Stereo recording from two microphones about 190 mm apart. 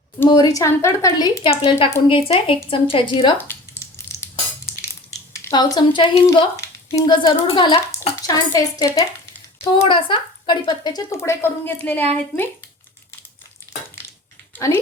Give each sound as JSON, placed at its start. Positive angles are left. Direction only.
{"t": 0.3, "sound": "speech", "side_deg": 20}
{"t": 1.5, "sound": "a woman's voice", "side_deg": 30}
{"t": 3.3, "sound": "sizzle", "side_deg": 10}
{"t": 5.3, "sound": "a woman's voice", "side_deg": 15}
{"t": 14.5, "sound": "speech", "side_deg": 10}